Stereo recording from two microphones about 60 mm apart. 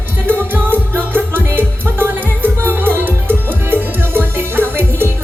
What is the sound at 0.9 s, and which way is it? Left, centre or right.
Music, right.